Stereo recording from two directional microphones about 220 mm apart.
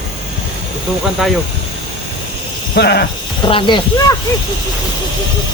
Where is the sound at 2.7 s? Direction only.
50° left (ahead or behind).